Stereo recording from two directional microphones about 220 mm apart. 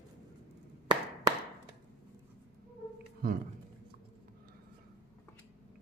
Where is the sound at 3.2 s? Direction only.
40° right (ahead or behind).